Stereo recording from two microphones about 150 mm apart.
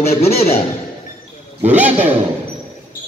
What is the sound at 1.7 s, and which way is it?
Speech, 10° right (ahead or behind).